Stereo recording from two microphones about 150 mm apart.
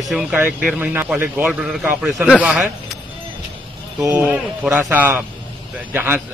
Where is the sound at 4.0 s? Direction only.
20° right (ahead or behind).